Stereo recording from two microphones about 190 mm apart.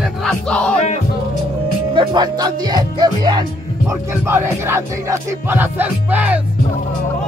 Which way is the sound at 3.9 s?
15° right (ahead or behind).